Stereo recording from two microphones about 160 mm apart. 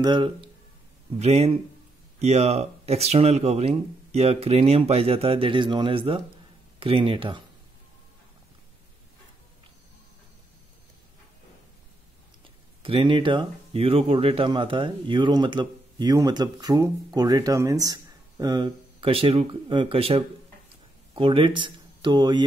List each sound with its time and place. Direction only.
0.0 s speech: 30° right (ahead or behind)
1.2 s speech: 40° right (ahead or behind)
12.8 s speech: 35° right (ahead or behind)